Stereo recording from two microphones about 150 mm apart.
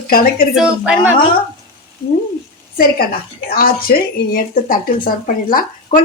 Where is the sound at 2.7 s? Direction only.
80° left.